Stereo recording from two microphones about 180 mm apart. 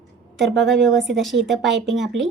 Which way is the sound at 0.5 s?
Centre (ahead or behind).